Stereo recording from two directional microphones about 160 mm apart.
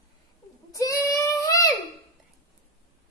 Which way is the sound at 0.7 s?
20° left (ahead or behind).